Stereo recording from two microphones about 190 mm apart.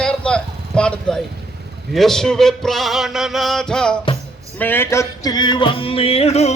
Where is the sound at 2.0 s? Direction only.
Centre (ahead or behind).